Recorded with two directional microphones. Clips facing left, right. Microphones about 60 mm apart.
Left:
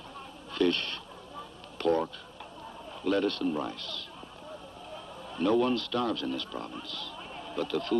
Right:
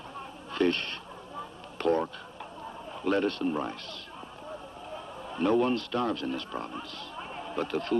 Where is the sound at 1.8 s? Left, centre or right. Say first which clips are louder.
Even; right.